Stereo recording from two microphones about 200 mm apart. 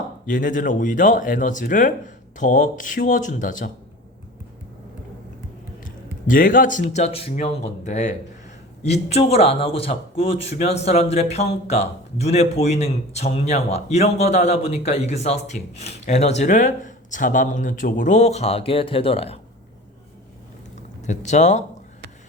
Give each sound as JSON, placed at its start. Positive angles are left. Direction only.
{"t": 0.3, "sound": "a man's voice", "side_deg": 40}
{"t": 5.8, "sound": "a man's voice", "side_deg": 45}
{"t": 21.0, "sound": "a man's voice", "side_deg": 35}